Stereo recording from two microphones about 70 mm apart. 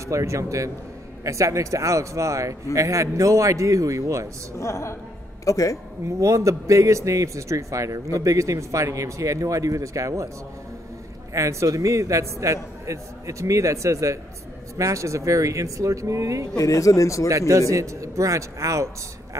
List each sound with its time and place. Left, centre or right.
0.0 s a man's voice: right
4.6 s speech: left
6.0 s a man's voice: right
11.3 s a man's voice: right
16.5 s speech: left
17.3 s a man's voice: right